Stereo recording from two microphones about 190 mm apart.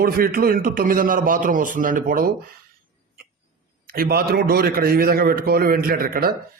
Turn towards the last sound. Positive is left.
turn(degrees=-50)  # may be behind; listen again after turning